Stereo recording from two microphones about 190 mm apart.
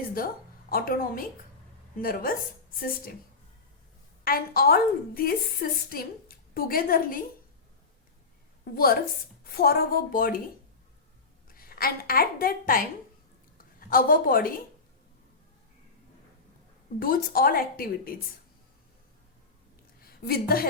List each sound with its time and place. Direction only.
0.7 s a woman's voice: 50° left (ahead or behind)
4.2 s a woman's voice: 50° left (ahead or behind)
8.7 s a woman's voice: 50° left (ahead or behind)
11.4 s a woman's voice: 50° left (ahead or behind)
17.0 s a woman's voice: 50° left (ahead or behind)
20.0 s a woman's voice: 50° left (ahead or behind)